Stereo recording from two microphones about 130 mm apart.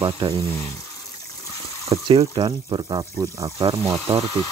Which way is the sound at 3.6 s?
50° right (ahead or behind).